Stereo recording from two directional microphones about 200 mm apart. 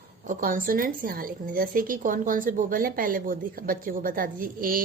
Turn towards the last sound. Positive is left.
turn(degrees=-45)  # may be behind; listen again after turning